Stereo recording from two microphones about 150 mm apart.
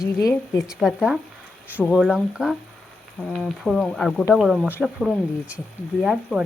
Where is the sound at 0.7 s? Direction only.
5° right (ahead or behind).